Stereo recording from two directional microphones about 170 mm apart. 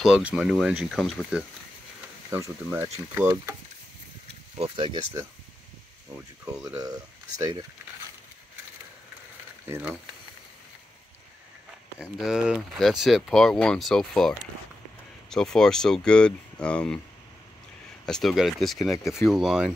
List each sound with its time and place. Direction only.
0.0 s speech: 5° right (ahead or behind)
2.3 s speech: 15° right (ahead or behind)
4.6 s speech: 30° right (ahead or behind)
6.4 s speech: 20° right (ahead or behind)
9.7 s speech: 10° right (ahead or behind)
12.0 s speech: 5° right (ahead or behind)
18.0 s speech: centre (ahead or behind)